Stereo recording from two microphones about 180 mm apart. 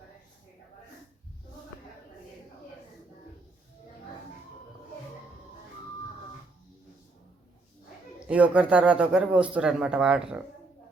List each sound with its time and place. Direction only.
8.3 s speech: 5° right (ahead or behind)